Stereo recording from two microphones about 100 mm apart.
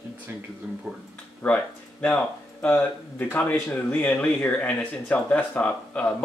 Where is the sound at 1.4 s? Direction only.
10° left (ahead or behind).